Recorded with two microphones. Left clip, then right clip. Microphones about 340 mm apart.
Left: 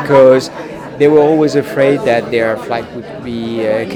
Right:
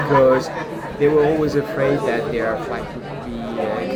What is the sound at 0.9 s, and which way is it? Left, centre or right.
A man's voice, left.